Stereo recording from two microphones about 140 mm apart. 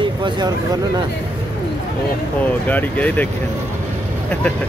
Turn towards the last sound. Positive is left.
turn(degrees=10)  # may be behind; listen again after turning